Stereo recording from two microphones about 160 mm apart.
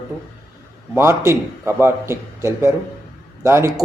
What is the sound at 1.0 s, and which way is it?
A man's voice, 15° right (ahead or behind).